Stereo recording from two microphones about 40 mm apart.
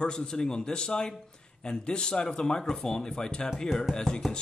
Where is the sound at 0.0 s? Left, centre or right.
Centre.